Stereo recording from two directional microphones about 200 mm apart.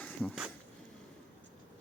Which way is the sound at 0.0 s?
Centre (ahead or behind).